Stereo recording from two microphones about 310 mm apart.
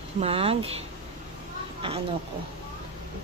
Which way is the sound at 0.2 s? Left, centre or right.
Centre.